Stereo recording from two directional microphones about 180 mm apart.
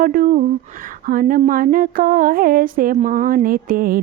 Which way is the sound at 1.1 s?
50° right (ahead or behind).